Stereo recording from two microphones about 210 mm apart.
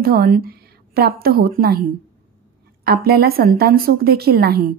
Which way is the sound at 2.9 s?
45° right (ahead or behind).